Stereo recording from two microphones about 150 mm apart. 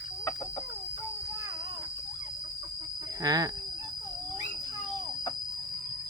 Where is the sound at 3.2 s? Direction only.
25° right (ahead or behind).